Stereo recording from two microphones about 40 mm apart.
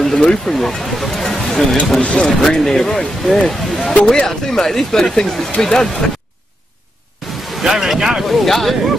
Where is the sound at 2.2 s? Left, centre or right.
Centre.